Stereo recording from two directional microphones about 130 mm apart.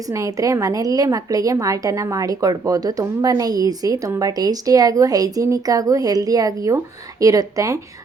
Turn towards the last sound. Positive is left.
turn(degrees=-25)  # may be behind; listen again after turning